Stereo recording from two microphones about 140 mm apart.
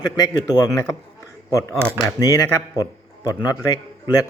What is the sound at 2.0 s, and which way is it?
Speech, 25° left (ahead or behind).